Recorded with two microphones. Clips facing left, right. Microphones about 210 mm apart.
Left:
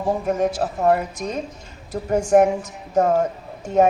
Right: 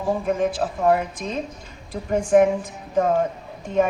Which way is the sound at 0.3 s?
45° left (ahead or behind).